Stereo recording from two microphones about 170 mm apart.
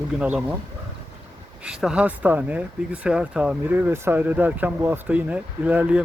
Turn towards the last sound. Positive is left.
turn(degrees=-10)  # may be behind; listen again after turning